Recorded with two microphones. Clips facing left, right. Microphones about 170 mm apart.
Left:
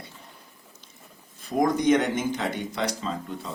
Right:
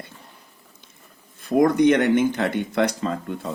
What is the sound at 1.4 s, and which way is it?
Speech, 60° right (ahead or behind).